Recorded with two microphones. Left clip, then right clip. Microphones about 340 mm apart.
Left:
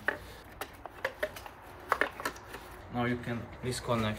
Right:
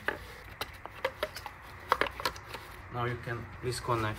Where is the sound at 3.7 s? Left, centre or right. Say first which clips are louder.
Even; right.